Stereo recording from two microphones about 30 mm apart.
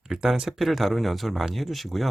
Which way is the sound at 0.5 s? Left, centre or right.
Centre.